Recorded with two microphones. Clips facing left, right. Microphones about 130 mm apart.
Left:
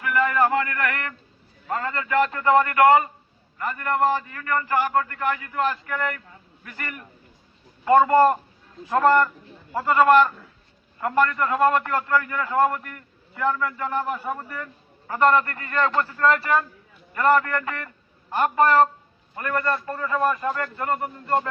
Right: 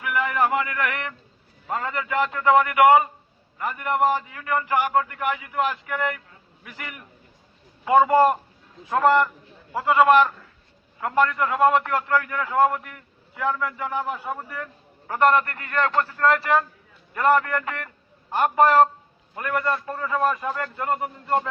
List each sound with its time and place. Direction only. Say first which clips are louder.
0.0 s a man's voice: left 2 dB; 10° right (ahead or behind)